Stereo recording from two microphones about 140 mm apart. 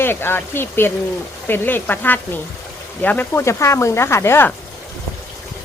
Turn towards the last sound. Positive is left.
turn(degrees=15)  # may be behind; listen again after turning